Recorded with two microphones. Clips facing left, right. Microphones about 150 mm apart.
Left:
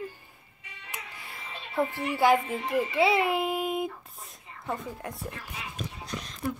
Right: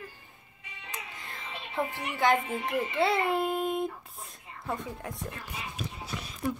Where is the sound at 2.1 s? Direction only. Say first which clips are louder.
Left 3 dB; 5° left (ahead or behind).